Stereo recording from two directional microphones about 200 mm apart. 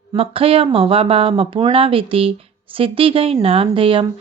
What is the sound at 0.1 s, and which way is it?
Speech, 30° right (ahead or behind).